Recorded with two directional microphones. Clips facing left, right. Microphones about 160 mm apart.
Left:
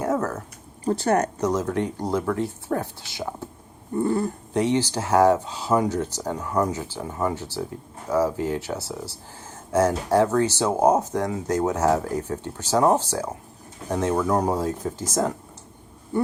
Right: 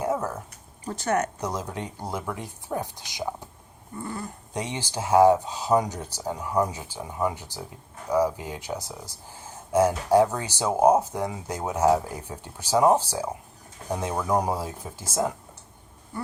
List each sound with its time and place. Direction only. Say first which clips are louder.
0.0 s a sound: left 3 dB; 10° right (ahead or behind)
0.9 s speech: left 5 dB; 35° left (ahead or behind)
1.4 s speech: left 8 dB; 10° right (ahead or behind)
4.5 s speech: left 9 dB; 15° right (ahead or behind)